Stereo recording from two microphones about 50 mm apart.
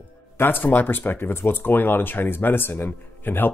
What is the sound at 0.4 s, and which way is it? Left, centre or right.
Speech, left.